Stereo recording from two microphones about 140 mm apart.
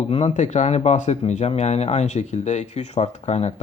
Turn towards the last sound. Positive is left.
turn(degrees=50)  # may be behind; listen again after turning